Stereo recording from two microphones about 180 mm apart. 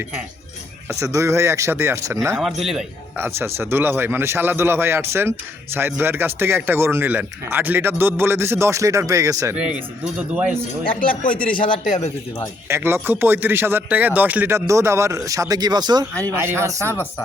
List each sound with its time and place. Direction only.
0.9 s speech: 15° right (ahead or behind)
2.3 s speech: centre (ahead or behind)
3.2 s speech: 15° right (ahead or behind)
11.0 s speech: 50° left (ahead or behind)
11.9 s speech: 40° left (ahead or behind)
12.6 s speech: 15° right (ahead or behind)
16.8 s speech: 10° left (ahead or behind)